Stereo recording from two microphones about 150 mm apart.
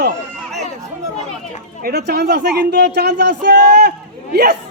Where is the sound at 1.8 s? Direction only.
90° right.